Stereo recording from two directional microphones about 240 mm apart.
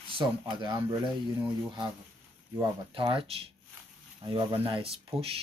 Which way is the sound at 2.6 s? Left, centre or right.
Right.